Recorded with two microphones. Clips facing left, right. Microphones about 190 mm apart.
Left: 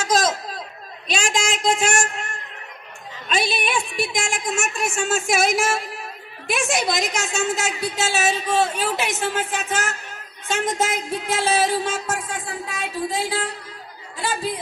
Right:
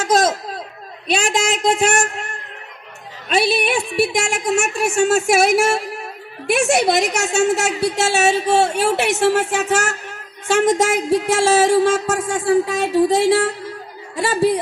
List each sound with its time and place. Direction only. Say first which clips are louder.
0.0 s speech: right 4 dB; 55° right (ahead or behind)
1.0 s music: right 5 dB; 60° right (ahead or behind)
3.3 s music: right 6 dB; 60° right (ahead or behind)